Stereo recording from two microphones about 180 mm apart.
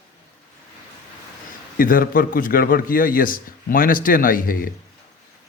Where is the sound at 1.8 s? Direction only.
50° left (ahead or behind).